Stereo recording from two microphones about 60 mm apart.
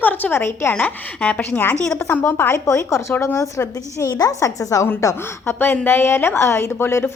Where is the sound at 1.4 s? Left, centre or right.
Left.